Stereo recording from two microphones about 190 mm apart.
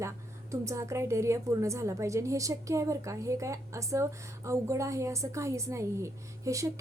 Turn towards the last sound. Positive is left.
turn(degrees=-15)  # may be behind; listen again after turning